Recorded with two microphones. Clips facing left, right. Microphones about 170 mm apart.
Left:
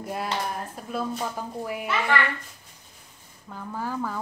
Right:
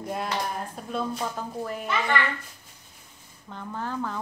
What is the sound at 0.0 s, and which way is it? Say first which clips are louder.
A woman's voice: even; 5° left (ahead or behind).